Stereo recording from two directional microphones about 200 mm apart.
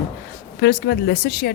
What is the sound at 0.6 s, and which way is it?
Speech, 55° left (ahead or behind).